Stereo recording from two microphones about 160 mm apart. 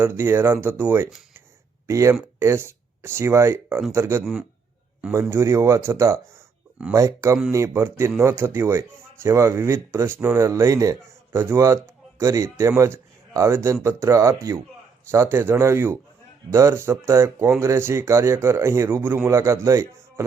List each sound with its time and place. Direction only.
0.0 s speech: 15° right (ahead or behind)
5.3 s a man's voice: 20° right (ahead or behind)